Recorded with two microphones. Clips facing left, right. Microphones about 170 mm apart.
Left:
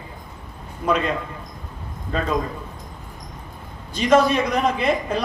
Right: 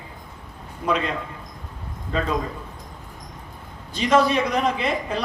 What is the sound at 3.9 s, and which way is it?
A woman's voice, 45° left (ahead or behind).